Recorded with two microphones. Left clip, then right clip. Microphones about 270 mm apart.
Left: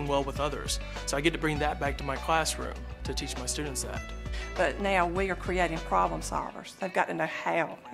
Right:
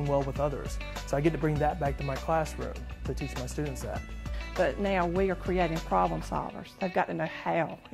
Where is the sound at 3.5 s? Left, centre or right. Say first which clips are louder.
Even; right.